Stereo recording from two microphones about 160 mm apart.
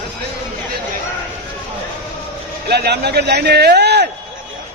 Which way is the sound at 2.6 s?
90° right.